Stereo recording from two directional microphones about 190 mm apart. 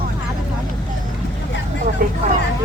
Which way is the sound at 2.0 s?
50° right (ahead or behind).